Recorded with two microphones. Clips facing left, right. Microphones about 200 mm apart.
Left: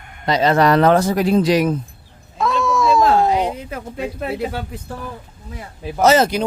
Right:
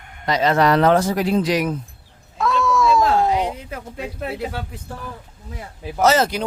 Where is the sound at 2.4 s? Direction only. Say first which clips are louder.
Left 1 dB; 20° left (ahead or behind).